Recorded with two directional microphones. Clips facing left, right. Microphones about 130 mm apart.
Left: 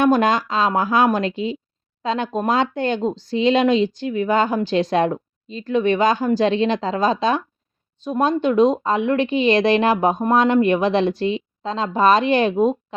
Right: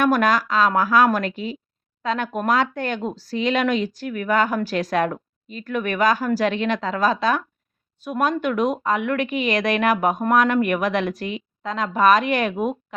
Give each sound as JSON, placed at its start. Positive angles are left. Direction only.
{"t": 0.0, "sound": "speech", "side_deg": 25}